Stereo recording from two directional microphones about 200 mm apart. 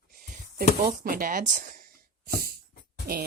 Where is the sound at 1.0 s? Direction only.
45° right (ahead or behind).